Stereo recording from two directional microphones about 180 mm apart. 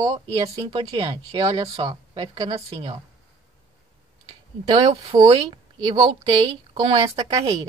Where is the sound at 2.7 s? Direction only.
35° right (ahead or behind).